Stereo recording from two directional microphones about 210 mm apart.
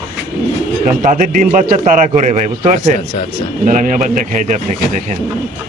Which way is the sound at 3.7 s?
40° right (ahead or behind).